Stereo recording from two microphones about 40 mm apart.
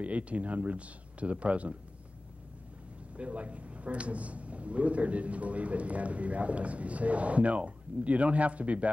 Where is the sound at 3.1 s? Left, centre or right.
Right.